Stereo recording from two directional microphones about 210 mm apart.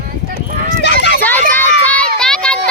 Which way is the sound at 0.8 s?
55° left (ahead or behind).